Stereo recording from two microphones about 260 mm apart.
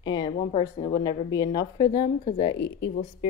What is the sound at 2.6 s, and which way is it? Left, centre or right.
Speech, left.